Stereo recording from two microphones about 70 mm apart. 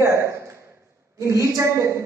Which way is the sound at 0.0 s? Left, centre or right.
Right.